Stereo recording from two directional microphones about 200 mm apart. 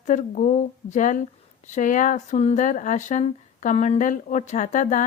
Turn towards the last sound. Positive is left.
turn(degrees=40)  # may be behind; listen again after turning